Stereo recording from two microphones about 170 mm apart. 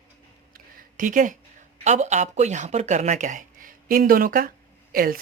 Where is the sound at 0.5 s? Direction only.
50° right (ahead or behind).